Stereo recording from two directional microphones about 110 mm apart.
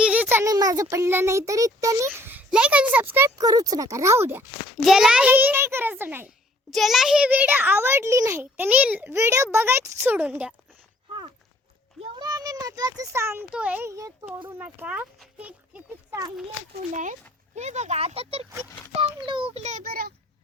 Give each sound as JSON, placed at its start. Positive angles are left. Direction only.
{"t": 0.0, "sound": "a sound", "side_deg": -10}
{"t": 0.4, "sound": "a child's voice", "side_deg": -35}
{"t": 2.0, "sound": "a child's voice", "side_deg": -20}
{"t": 3.3, "sound": "a child's voice", "side_deg": -35}
{"t": 4.8, "sound": "a child's voice", "side_deg": -5}
{"t": 6.7, "sound": "a child's voice", "side_deg": 0}
{"t": 12.2, "sound": "a child's voice", "side_deg": -35}
{"t": 13.5, "sound": "a child's voice", "side_deg": -10}
{"t": 13.8, "sound": "a child's voice", "side_deg": -30}
{"t": 14.6, "sound": "a child's voice", "side_deg": -15}
{"t": 16.9, "sound": "speech", "side_deg": -90}
{"t": 18.9, "sound": "a child's voice", "side_deg": -55}
{"t": 19.5, "sound": "speech", "side_deg": -90}